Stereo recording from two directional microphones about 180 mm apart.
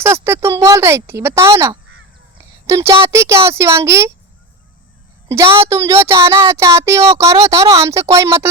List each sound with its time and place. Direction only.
0.0 s speech: 15° right (ahead or behind)
5.3 s speech: 15° right (ahead or behind)